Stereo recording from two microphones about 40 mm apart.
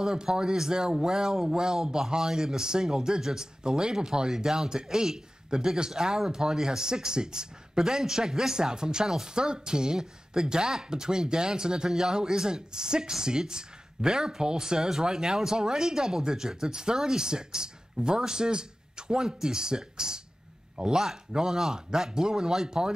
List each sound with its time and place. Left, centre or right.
0.0 s speech: centre